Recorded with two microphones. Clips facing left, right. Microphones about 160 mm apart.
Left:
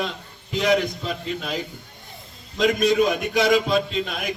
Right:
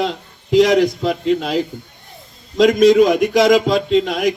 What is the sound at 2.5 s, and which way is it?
A man's voice, 90° right.